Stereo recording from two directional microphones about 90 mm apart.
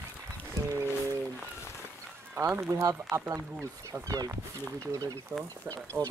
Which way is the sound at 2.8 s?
40° right (ahead or behind).